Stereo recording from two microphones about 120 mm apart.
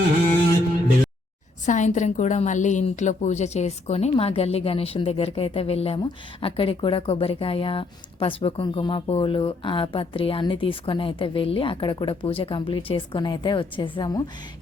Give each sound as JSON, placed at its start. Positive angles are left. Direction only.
{"t": 1.6, "sound": "a woman's voice", "side_deg": 90}